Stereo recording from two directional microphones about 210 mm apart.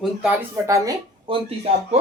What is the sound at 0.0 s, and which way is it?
Speech, 5° right (ahead or behind).